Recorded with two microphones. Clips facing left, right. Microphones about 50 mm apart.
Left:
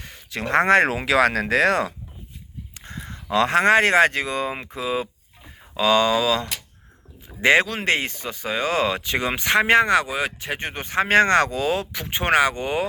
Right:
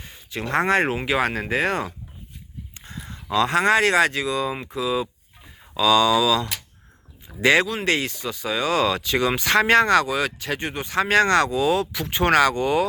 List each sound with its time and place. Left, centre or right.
0.0 s a sound: left
0.4 s speech: left
1.0 s speech: left
2.7 s speech: left
10.6 s speech: left